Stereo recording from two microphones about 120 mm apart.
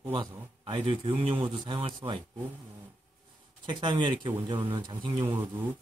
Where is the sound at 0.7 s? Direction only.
45° right (ahead or behind).